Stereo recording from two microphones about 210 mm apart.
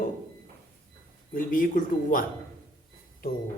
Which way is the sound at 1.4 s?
40° left (ahead or behind).